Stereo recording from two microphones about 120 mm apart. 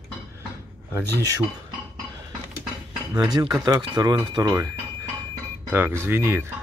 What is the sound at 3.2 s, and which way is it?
Speech, 40° right (ahead or behind).